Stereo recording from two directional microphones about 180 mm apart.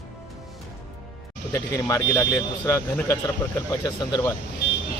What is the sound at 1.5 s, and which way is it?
Speech, 15° left (ahead or behind).